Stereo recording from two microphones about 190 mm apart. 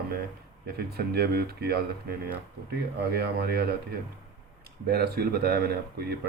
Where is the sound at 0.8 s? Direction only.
60° right (ahead or behind).